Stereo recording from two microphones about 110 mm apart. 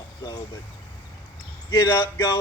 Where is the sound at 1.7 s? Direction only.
30° left (ahead or behind).